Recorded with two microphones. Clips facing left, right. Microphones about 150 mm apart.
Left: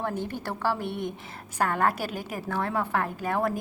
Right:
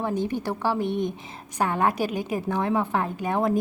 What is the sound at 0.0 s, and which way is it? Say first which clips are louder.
A woman's voice: right 5 dB; 15° right (ahead or behind).